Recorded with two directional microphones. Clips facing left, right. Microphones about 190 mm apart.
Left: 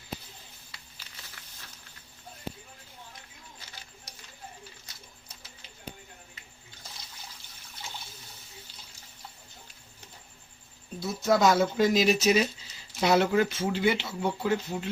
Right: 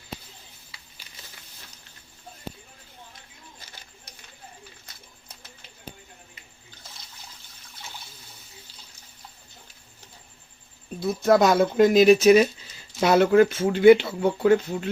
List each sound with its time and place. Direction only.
11.0 s speech: 55° right (ahead or behind)